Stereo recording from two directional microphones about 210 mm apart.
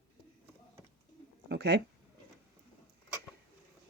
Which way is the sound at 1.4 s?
50° right (ahead or behind).